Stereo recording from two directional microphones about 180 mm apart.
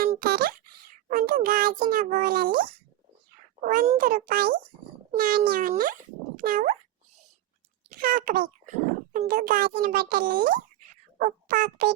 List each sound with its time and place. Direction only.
0.2 s a sound: 55° right (ahead or behind)
1.9 s a child's voice: 50° right (ahead or behind)
7.9 s a child's voice: 55° right (ahead or behind)
11.2 s music: 50° right (ahead or behind)